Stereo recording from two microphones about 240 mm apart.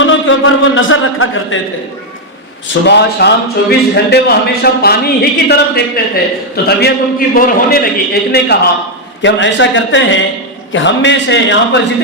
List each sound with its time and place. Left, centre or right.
0.0 s a man's voice: left
2.8 s a man's voice: left